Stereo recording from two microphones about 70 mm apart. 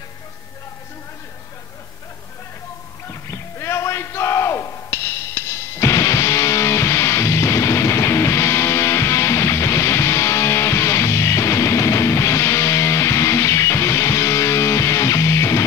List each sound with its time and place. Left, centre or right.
3.1 s music: left